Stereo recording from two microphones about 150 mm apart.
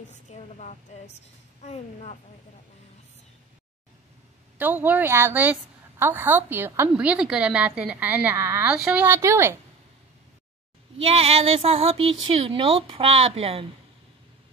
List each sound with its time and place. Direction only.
0.1 s a woman's voice: 50° left (ahead or behind)
4.6 s a woman's voice: 10° right (ahead or behind)
11.0 s speech: 40° right (ahead or behind)